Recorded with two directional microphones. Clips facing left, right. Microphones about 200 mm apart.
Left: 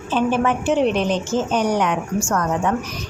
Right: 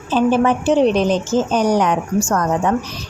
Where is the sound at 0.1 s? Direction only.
35° right (ahead or behind).